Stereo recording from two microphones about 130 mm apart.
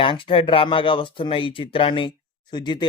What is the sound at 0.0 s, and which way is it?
Speech, 40° left (ahead or behind).